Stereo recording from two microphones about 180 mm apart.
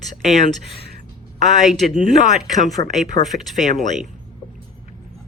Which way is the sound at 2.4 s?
Centre (ahead or behind).